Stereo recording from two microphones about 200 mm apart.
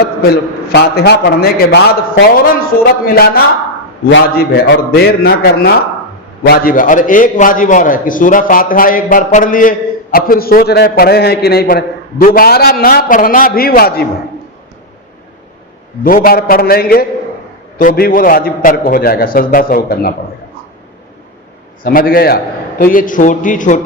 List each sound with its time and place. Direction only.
0.0 s a man's voice: 50° left (ahead or behind)
3.1 s a man's voice: 50° left (ahead or behind)
16.0 s a man's voice: 45° left (ahead or behind)
21.8 s a man's voice: 45° left (ahead or behind)